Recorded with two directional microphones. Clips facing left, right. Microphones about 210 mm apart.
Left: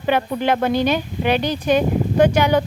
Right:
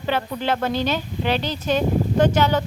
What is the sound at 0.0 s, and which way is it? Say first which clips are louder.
A woman's voice: left 5 dB; 15° left (ahead or behind).